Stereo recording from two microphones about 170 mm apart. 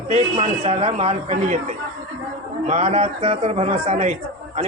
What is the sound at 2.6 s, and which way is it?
A man's voice, 40° right (ahead or behind).